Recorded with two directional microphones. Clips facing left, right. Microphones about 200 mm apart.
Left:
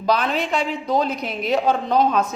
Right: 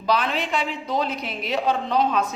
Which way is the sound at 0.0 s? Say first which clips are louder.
Left 3 dB; 45° left (ahead or behind).